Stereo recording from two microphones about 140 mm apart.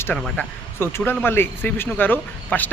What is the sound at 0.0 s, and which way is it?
Speech, 15° left (ahead or behind).